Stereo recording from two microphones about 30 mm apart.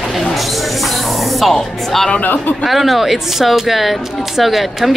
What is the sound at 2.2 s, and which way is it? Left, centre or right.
Speech, left.